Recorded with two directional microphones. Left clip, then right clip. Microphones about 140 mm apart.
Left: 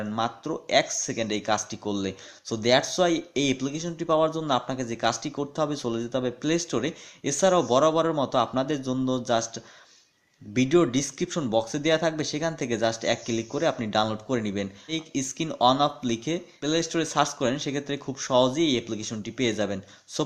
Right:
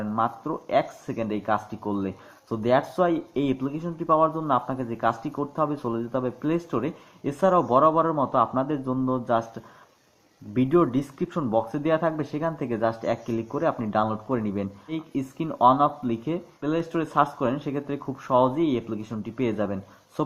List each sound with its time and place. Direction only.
0.0 s speech: 25° left (ahead or behind)